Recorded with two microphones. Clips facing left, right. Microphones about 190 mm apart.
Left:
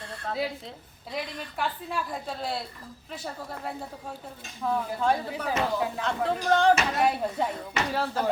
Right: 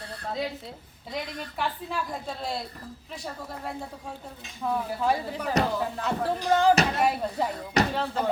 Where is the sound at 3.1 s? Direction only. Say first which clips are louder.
Left 1 dB; centre (ahead or behind).